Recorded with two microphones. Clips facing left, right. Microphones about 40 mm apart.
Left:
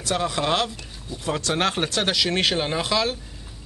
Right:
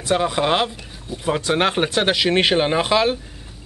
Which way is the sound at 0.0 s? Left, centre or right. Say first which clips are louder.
Right 5 dB; centre.